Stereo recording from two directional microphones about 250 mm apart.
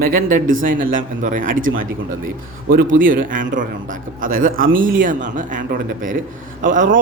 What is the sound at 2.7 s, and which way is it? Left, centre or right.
Speech, right.